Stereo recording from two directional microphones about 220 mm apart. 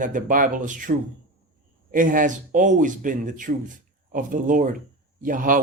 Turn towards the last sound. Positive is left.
turn(degrees=-40)  # may be behind; listen again after turning